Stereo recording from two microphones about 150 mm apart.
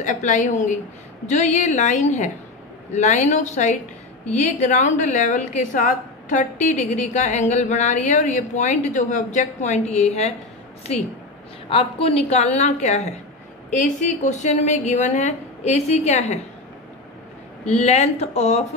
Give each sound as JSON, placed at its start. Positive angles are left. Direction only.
{"t": 0.0, "sound": "a woman's voice", "side_deg": 55}
{"t": 11.7, "sound": "a woman's voice", "side_deg": 45}
{"t": 17.6, "sound": "a woman's voice", "side_deg": 45}